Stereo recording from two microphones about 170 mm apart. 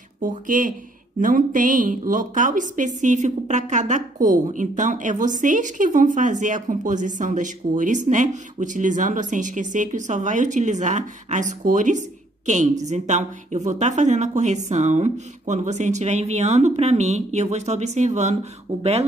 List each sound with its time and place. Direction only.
0.2 s a woman's voice: 50° right (ahead or behind)